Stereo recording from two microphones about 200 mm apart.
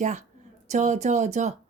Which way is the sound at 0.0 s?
35° right (ahead or behind).